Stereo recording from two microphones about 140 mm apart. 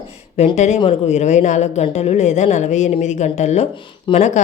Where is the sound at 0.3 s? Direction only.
55° left (ahead or behind).